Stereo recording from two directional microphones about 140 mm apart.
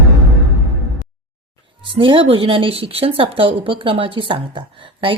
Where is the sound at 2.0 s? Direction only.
40° right (ahead or behind).